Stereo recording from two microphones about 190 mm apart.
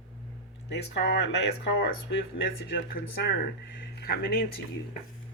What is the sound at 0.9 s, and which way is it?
Speech, 65° left (ahead or behind).